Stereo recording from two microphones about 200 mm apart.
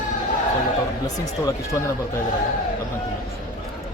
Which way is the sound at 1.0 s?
15° left (ahead or behind).